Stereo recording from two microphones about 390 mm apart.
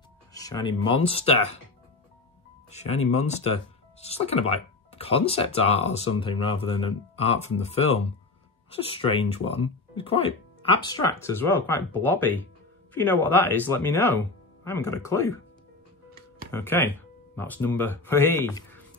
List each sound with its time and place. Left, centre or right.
0.3 s speech: centre
2.7 s speech: centre
16.5 s speech: centre